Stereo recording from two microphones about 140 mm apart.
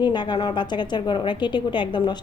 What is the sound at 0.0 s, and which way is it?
A woman's voice, 30° left (ahead or behind).